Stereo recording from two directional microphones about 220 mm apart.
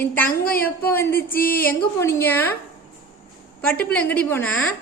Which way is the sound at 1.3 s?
40° left (ahead or behind).